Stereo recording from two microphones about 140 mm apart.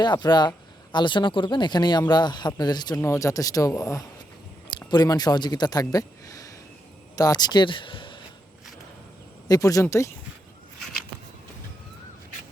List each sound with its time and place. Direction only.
0.0 s speech: 30° left (ahead or behind)
9.5 s speech: 25° left (ahead or behind)